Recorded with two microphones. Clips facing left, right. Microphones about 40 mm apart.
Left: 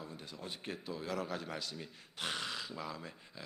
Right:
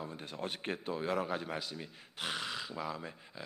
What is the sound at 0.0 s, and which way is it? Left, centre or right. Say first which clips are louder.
Speech: right 6 dB; right.